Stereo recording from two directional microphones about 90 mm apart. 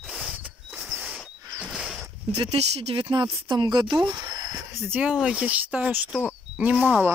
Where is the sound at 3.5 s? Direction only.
55° right (ahead or behind).